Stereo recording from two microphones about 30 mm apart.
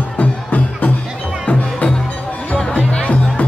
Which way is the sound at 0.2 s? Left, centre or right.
Left.